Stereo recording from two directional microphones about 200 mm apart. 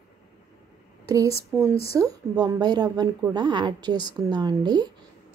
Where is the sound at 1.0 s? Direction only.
15° right (ahead or behind).